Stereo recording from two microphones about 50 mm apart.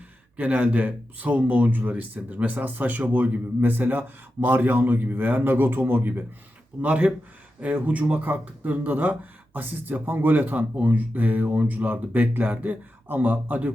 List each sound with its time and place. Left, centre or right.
0.3 s speech: right
6.8 s speech: right